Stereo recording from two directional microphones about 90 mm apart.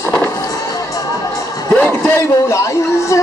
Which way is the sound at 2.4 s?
35° left (ahead or behind).